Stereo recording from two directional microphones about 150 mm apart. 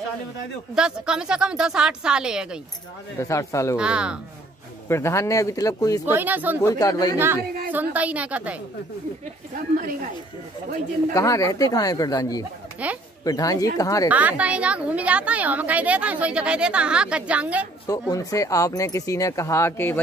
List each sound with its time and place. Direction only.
0.7 s a woman's voice: 5° right (ahead or behind)
3.2 s speech: 20° left (ahead or behind)
3.7 s a woman's voice: 5° right (ahead or behind)
4.8 s speech: 20° left (ahead or behind)
6.1 s a woman's voice: 10° right (ahead or behind)
6.6 s speech: 25° left (ahead or behind)
7.7 s a woman's voice: 10° right (ahead or behind)
11.1 s speech: 20° left (ahead or behind)
12.8 s a woman's voice: 10° right (ahead or behind)
13.2 s speech: 25° left (ahead or behind)
14.0 s a woman's voice: 10° right (ahead or behind)
17.8 s speech: 25° left (ahead or behind)